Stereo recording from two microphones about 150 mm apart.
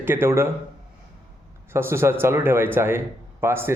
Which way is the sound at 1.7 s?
15° right (ahead or behind).